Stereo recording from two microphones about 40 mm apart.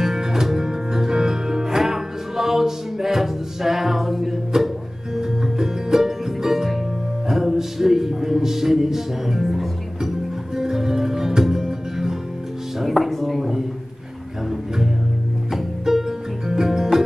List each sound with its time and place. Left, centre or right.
0.0 s music: centre
15.8 s music: centre